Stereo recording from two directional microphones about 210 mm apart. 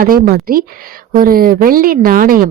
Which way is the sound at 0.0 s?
45° right (ahead or behind).